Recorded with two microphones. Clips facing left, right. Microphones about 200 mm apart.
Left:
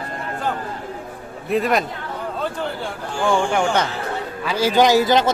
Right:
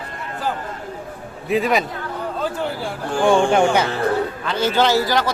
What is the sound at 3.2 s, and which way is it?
Speech, 20° right (ahead or behind).